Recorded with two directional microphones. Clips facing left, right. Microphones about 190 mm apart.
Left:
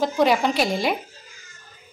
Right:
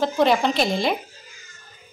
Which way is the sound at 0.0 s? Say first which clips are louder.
Even; 10° left (ahead or behind).